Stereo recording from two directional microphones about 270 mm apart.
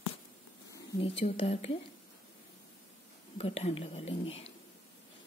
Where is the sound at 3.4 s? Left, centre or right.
Left.